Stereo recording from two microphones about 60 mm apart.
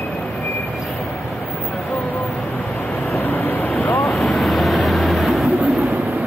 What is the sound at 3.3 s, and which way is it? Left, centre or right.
Vehicle, left.